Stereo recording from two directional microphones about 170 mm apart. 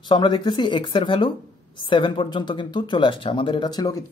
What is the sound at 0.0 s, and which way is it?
Speech, 25° left (ahead or behind).